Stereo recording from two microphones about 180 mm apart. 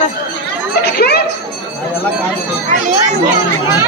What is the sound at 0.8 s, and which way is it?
Speech, 60° left (ahead or behind).